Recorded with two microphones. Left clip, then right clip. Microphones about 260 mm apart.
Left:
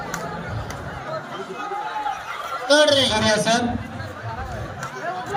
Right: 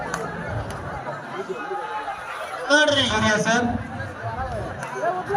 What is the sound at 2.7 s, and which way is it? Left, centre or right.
Speech, left.